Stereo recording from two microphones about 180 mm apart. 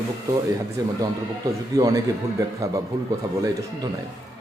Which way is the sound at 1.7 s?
20° right (ahead or behind).